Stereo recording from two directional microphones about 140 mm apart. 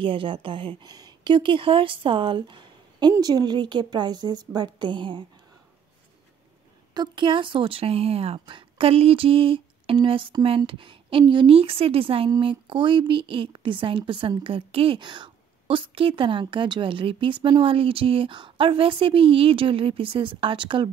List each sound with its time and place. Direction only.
0.0 s speech: 40° right (ahead or behind)
6.9 s speech: 30° right (ahead or behind)